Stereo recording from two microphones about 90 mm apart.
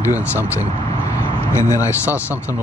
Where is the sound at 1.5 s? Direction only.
30° left (ahead or behind).